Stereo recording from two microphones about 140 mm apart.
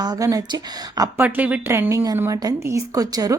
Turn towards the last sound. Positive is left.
turn(degrees=-25)  # may be behind; listen again after turning